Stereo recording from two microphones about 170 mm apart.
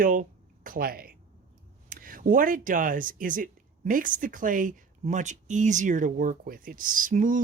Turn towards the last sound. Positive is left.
turn(degrees=-50)  # may be behind; listen again after turning